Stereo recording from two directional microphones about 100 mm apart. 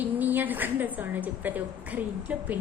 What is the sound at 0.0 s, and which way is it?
A woman's voice, 20° right (ahead or behind).